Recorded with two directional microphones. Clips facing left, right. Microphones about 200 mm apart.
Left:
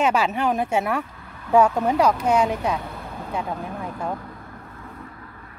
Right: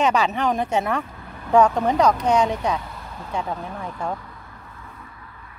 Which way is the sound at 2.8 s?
55° left (ahead or behind).